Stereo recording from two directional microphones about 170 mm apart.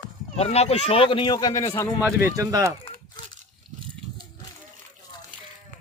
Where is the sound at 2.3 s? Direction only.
20° right (ahead or behind).